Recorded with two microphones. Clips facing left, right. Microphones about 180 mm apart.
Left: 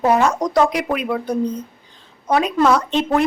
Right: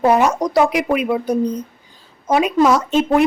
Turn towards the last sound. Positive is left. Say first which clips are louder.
# right 3 dB
turn(degrees=-5)  # may be behind; listen again after turning